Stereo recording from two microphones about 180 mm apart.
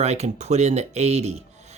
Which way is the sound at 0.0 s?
40° right (ahead or behind).